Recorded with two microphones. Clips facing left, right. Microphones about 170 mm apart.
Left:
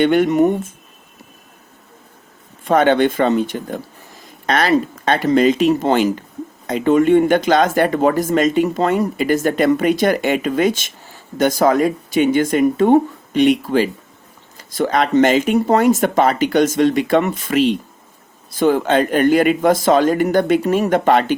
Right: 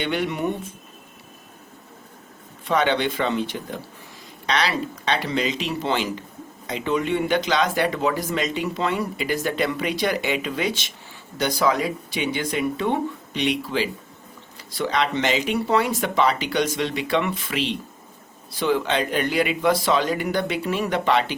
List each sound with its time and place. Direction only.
0.0 s speech: 50° left (ahead or behind)
2.6 s speech: 50° left (ahead or behind)